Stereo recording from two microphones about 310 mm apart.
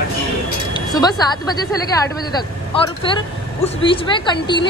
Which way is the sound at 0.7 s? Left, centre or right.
Centre.